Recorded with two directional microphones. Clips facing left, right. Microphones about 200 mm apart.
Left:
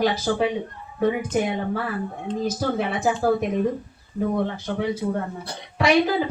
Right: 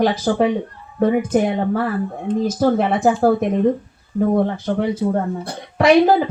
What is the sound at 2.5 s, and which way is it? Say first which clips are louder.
A woman's voice: right 8 dB; 55° right (ahead or behind).